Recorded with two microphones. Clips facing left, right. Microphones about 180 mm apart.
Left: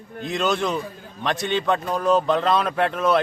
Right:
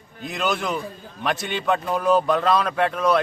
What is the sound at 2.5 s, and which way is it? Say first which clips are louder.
Speech: even; centre (ahead or behind).